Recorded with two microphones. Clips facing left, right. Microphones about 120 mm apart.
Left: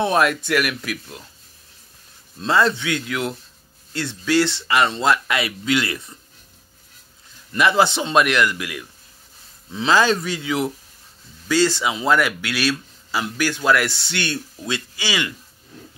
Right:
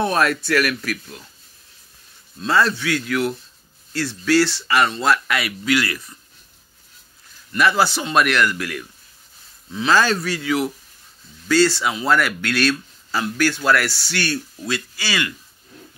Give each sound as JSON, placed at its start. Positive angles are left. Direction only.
{"t": 0.0, "sound": "speech", "side_deg": 15}
{"t": 2.4, "sound": "speech", "side_deg": 20}
{"t": 7.5, "sound": "speech", "side_deg": 20}